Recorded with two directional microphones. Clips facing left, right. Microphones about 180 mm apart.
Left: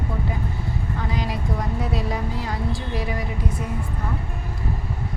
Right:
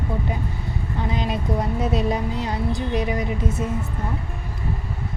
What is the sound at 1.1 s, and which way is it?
Speech, 20° right (ahead or behind).